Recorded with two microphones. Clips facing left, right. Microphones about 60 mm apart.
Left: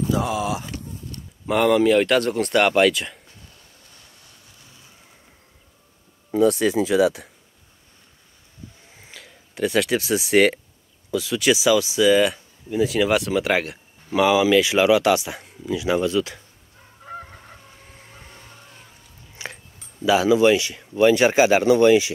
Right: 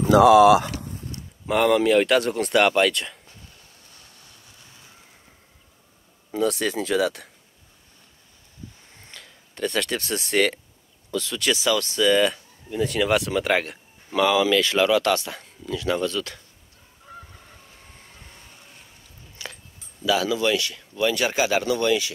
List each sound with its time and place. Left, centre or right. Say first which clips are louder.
0.0 s speech: right 10 dB; right
1.4 s speech: left 2 dB; centre
6.3 s speech: left 6 dB; centre
8.9 s speech: left 2 dB; centre
14.1 s speech: left 3 dB; centre
17.1 s fowl: left 8 dB; left
19.3 s a sound: left 3 dB; left
20.9 s speech: left 8 dB; left